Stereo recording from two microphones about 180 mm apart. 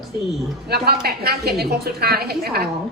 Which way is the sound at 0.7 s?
60° right (ahead or behind).